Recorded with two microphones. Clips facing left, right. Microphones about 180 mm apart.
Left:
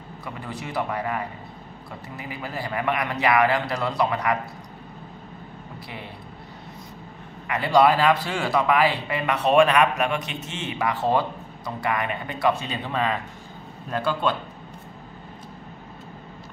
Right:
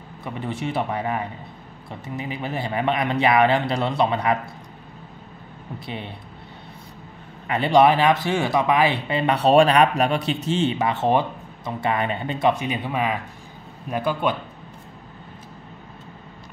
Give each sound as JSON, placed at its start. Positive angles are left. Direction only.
{"t": 0.2, "sound": "speech", "side_deg": -25}
{"t": 7.4, "sound": "speech", "side_deg": -25}